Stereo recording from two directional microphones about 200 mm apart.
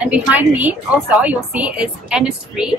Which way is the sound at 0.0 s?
5° right (ahead or behind).